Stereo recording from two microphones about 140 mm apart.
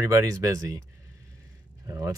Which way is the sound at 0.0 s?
20° right (ahead or behind).